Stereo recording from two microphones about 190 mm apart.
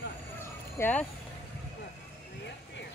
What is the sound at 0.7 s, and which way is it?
Speech, 10° left (ahead or behind).